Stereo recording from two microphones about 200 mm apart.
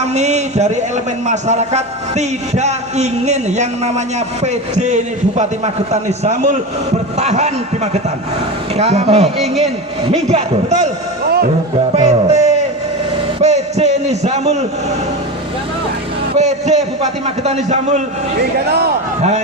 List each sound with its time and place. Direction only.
0.1 s a man's voice: 35° right (ahead or behind)
8.7 s a man's voice: 30° right (ahead or behind)
9.4 s a man's voice: centre (ahead or behind)
10.1 s a man's voice: 35° right (ahead or behind)
11.9 s music: 35° right (ahead or behind)
13.4 s a sound: 35° right (ahead or behind)
16.4 s a man's voice: 35° right (ahead or behind)